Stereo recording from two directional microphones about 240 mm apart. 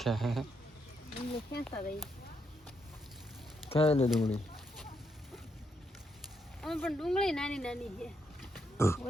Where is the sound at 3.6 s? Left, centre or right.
Left.